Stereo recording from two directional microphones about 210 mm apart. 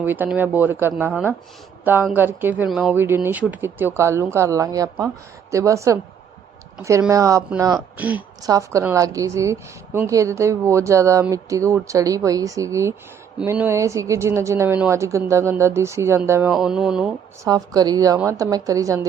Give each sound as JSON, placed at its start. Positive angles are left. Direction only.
{"t": 0.0, "sound": "speech", "side_deg": -10}
{"t": 7.1, "sound": "speech", "side_deg": -15}
{"t": 16.5, "sound": "a sound", "side_deg": -5}
{"t": 17.4, "sound": "speech", "side_deg": -20}